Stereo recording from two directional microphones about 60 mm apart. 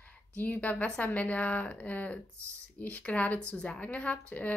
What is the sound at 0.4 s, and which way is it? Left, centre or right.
Speech, left.